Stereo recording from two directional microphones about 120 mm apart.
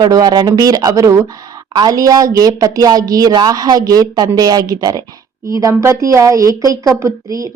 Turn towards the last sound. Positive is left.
turn(degrees=-30)  # may be behind; listen again after turning